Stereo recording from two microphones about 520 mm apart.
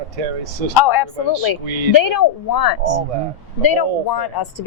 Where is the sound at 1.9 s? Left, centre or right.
Left.